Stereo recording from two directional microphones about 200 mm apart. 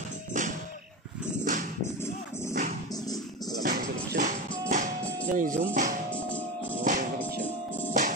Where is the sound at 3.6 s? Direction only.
45° right (ahead or behind).